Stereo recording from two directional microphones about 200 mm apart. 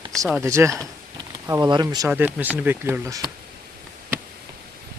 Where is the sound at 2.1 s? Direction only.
10° right (ahead or behind).